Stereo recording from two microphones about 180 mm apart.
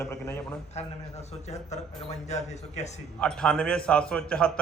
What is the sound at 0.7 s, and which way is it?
A man's voice, 40° left (ahead or behind).